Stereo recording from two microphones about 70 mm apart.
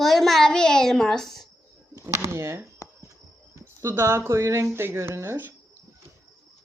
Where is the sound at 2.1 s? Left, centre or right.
Right.